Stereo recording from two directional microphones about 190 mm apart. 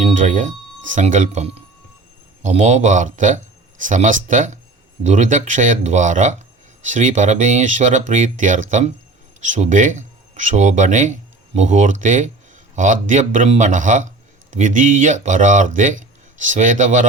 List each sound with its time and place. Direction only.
0.0 s speech: 40° right (ahead or behind)